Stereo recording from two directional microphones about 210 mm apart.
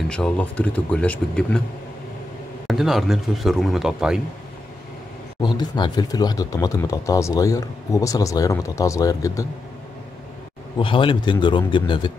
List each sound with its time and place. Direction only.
0.1 s speech: 5° left (ahead or behind)
2.7 s speech: centre (ahead or behind)
5.4 s speech: 20° left (ahead or behind)
10.8 s speech: 25° left (ahead or behind)